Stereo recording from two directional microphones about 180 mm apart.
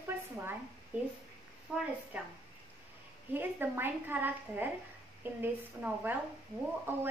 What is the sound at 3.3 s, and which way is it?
A woman's voice, 10° right (ahead or behind).